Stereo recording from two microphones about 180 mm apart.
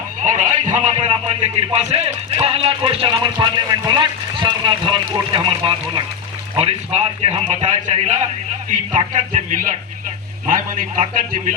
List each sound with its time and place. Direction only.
0.2 s a man's voice: 45° right (ahead or behind)